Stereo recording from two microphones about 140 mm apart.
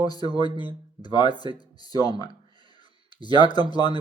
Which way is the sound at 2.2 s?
30° left (ahead or behind).